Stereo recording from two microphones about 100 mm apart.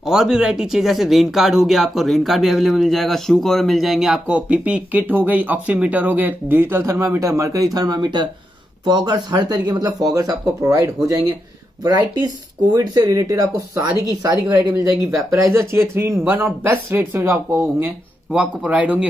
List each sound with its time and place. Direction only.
0.0 s speech: 5° right (ahead or behind)
4.3 s speech: 15° right (ahead or behind)
18.3 s speech: 10° right (ahead or behind)